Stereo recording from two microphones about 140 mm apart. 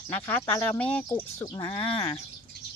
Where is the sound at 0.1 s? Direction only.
15° left (ahead or behind).